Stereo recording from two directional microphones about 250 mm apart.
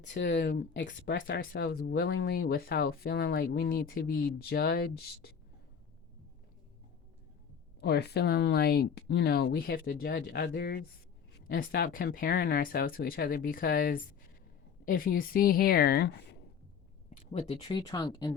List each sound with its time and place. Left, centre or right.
0.0 s speech: left
7.8 s speech: left
17.3 s speech: centre